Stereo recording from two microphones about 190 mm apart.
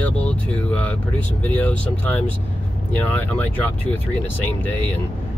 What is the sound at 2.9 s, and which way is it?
Speech, 10° left (ahead or behind).